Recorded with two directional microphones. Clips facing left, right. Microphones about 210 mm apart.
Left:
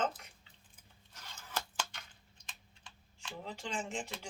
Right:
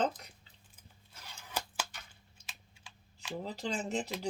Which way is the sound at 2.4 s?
5° right (ahead or behind).